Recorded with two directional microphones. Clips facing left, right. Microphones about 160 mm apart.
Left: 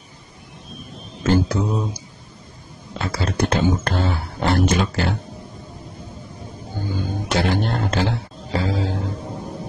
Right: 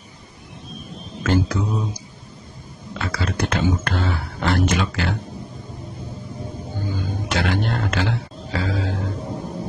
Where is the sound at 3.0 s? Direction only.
35° left (ahead or behind).